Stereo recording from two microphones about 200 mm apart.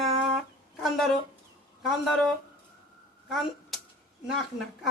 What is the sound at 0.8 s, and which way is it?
Speech, centre (ahead or behind).